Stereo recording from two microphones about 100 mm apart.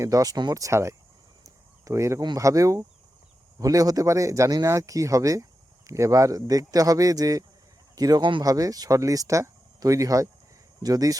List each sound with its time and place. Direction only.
0.0 s speech: 35° right (ahead or behind)
1.5 s a sound: 30° right (ahead or behind)
2.2 s speech: 35° right (ahead or behind)